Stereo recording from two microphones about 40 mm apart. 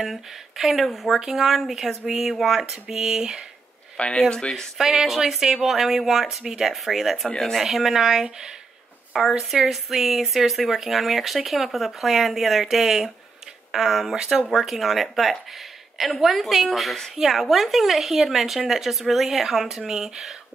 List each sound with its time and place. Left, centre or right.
0.0 s speech: centre
3.9 s a sound: left
4.7 s speech: centre